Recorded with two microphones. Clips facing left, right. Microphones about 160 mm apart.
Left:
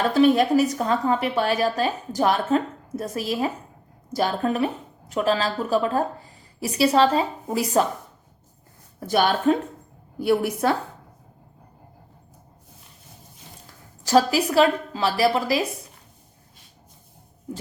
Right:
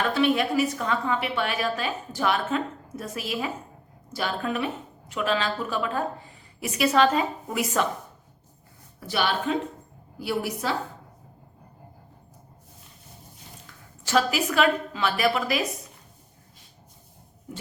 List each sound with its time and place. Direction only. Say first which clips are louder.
0.0 s a woman's voice: left 5 dB; 40° left (ahead or behind)
9.0 s speech: left 5 dB; 45° left (ahead or behind)
13.7 s a woman's voice: left 6 dB; 40° left (ahead or behind)